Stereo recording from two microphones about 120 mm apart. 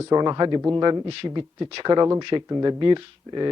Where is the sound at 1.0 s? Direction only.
45° right (ahead or behind).